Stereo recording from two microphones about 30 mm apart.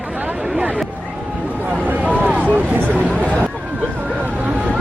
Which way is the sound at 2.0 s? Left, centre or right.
Right.